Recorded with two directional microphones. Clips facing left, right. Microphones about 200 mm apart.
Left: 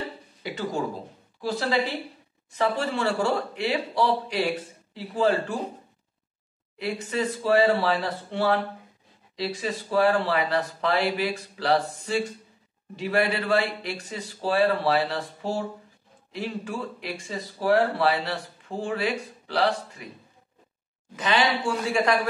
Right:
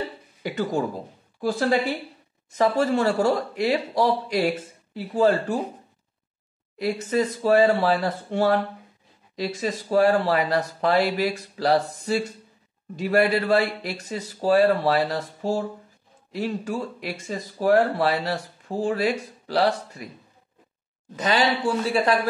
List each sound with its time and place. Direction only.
0.4 s speech: 50° right (ahead or behind)
6.8 s speech: 40° right (ahead or behind)
21.2 s speech: 40° right (ahead or behind)